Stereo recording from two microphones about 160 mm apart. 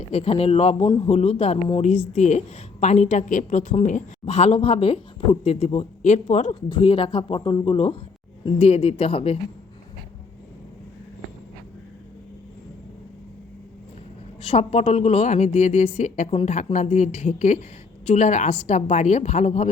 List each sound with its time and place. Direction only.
0.1 s speech: 40° left (ahead or behind)
0.9 s a man's voice: 25° left (ahead or behind)
1.1 s a woman's voice: 40° left (ahead or behind)
6.7 s speech: 35° left (ahead or behind)
14.4 s a woman's voice: 40° left (ahead or behind)